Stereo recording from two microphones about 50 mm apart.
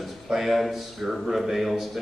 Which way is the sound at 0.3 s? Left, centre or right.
Centre.